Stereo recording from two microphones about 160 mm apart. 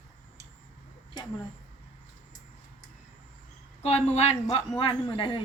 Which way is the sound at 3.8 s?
40° left (ahead or behind).